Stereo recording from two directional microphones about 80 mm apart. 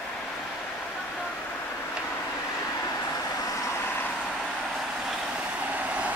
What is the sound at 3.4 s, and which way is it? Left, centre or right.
Vehicle, left.